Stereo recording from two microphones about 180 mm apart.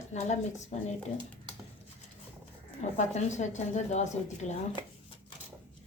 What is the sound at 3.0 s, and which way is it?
A woman's voice, 40° left (ahead or behind).